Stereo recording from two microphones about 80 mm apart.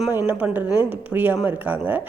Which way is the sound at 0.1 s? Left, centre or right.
Right.